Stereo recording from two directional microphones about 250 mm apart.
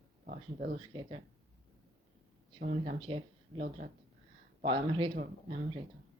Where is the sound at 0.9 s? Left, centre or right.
Centre.